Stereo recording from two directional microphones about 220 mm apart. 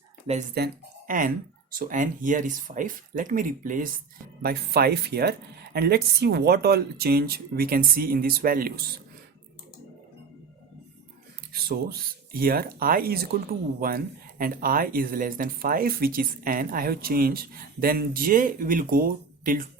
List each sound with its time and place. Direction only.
0.5 s speech: 45° right (ahead or behind)
11.5 s speech: 45° right (ahead or behind)